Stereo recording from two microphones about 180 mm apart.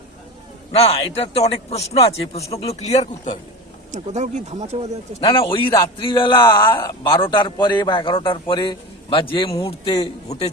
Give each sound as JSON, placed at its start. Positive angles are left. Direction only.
{"t": 0.8, "sound": "a man's voice", "side_deg": 35}
{"t": 3.9, "sound": "speech", "side_deg": -40}
{"t": 5.2, "sound": "a man's voice", "side_deg": 30}
{"t": 10.2, "sound": "a man's voice", "side_deg": 35}